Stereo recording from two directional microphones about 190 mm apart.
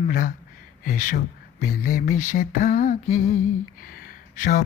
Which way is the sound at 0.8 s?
45° left (ahead or behind).